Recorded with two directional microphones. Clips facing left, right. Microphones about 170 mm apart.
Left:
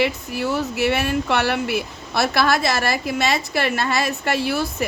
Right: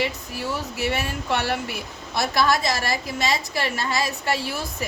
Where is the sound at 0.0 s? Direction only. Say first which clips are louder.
Left 5 dB; 70° left (ahead or behind).